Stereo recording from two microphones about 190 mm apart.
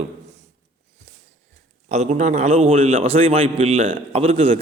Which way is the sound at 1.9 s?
35° right (ahead or behind).